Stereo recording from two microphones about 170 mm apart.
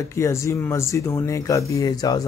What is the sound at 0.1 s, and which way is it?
Speech, 15° left (ahead or behind).